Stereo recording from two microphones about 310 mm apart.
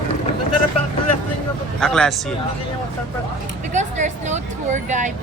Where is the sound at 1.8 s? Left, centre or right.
Centre.